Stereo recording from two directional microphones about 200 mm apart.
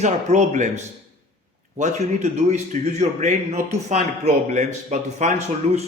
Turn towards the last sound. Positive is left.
turn(degrees=-35)  # may be behind; listen again after turning